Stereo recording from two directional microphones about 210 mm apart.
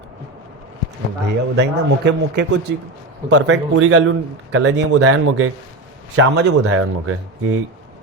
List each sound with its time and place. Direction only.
1.3 s speech: 55° right (ahead or behind)
3.2 s speech: 70° right (ahead or behind)
4.5 s speech: 90° right
6.1 s a man's voice: 55° right (ahead or behind)
6.7 s speech: 90° right